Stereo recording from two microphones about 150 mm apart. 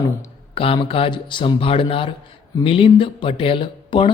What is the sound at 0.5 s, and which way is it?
Speech, 35° left (ahead or behind).